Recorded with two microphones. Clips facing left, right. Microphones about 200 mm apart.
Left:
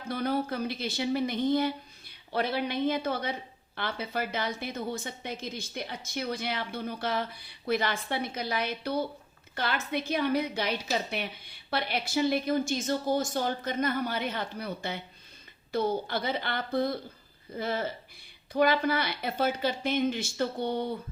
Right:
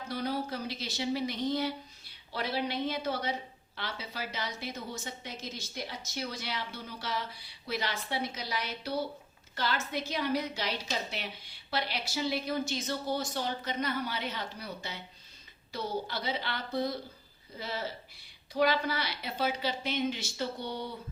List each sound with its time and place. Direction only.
0.1 s a woman's voice: 55° left (ahead or behind)